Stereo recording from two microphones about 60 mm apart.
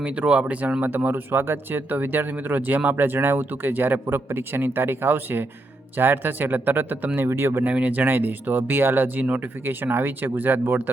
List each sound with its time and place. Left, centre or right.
0.0 s speech: centre
7.2 s speech: right
7.6 s speech: right
9.6 s speech: right